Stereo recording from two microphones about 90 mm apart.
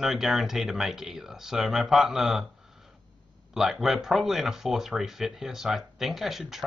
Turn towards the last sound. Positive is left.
turn(degrees=-5)  # may be behind; listen again after turning